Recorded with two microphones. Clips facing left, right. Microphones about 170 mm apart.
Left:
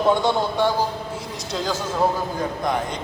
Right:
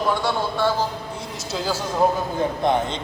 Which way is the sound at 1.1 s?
5° right (ahead or behind).